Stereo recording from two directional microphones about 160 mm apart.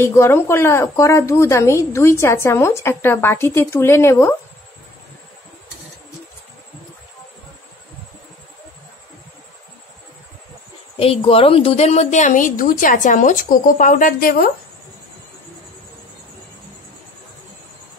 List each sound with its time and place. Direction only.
0.0 s a woman's voice: 15° left (ahead or behind)
11.0 s a woman's voice: 35° left (ahead or behind); by 14.5 s 65° left (ahead or behind)